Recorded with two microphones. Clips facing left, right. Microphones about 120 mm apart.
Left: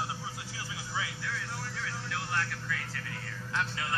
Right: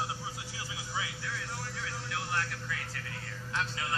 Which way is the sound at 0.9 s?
15° right (ahead or behind).